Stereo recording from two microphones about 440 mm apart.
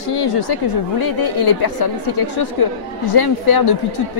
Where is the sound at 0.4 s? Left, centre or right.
Left.